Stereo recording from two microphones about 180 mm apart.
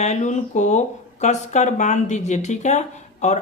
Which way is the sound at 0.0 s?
40° left (ahead or behind).